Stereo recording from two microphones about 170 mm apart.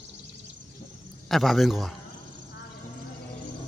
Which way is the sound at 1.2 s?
Centre (ahead or behind).